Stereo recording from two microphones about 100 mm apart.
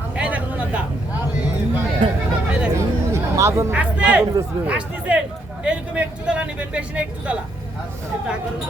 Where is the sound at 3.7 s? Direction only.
15° right (ahead or behind).